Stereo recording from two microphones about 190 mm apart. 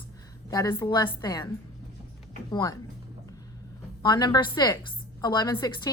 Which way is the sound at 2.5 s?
20° left (ahead or behind).